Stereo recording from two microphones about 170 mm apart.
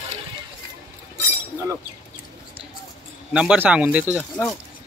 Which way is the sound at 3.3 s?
5° right (ahead or behind).